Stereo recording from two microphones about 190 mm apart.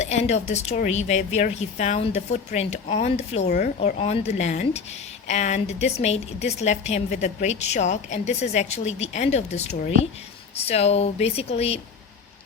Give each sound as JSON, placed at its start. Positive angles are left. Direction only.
{"t": 0.0, "sound": "speech", "side_deg": 35}